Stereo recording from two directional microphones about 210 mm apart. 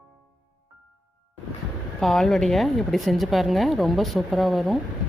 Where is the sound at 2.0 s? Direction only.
Centre (ahead or behind).